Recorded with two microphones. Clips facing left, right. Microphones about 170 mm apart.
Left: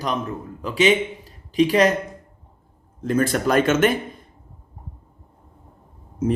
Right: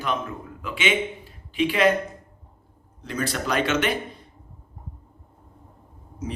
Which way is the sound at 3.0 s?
50° left (ahead or behind).